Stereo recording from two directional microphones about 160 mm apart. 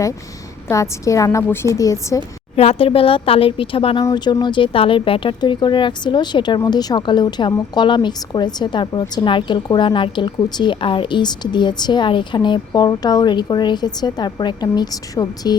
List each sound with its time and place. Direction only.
0.7 s a woman's voice: 20° left (ahead or behind)
2.6 s a woman's voice: 40° left (ahead or behind)